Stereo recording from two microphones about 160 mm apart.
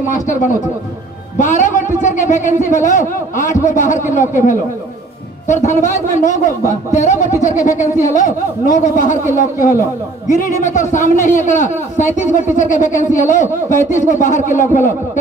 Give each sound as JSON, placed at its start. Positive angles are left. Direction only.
{"t": 1.4, "sound": "a man's voice", "side_deg": 50}